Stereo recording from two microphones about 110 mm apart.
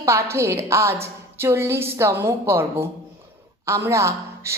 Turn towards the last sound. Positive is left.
turn(degrees=-25)  # may be behind; listen again after turning